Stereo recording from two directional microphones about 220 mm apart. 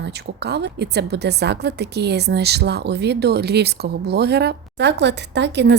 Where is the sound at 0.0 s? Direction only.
50° right (ahead or behind).